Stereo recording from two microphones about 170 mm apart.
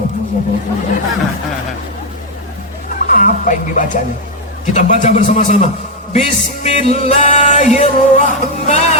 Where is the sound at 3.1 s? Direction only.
50° left (ahead or behind).